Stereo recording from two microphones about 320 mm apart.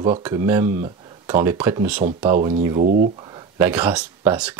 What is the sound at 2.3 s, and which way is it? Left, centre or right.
Speech, right.